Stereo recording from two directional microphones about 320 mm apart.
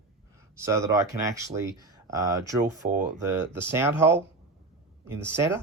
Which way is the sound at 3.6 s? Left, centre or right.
Centre.